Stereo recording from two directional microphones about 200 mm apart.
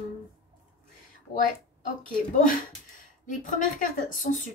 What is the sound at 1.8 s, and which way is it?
A woman's voice, 45° left (ahead or behind).